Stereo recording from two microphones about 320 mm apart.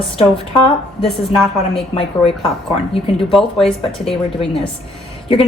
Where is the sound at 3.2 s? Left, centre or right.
Centre.